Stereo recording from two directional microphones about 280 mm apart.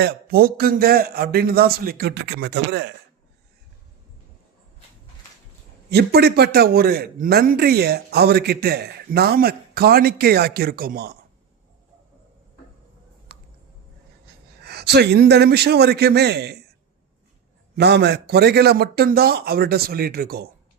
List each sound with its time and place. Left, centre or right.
0.0 s a man's voice: right
5.9 s a man's voice: right
13.3 s a sound: right
14.6 s a man's voice: right
17.7 s a man's voice: right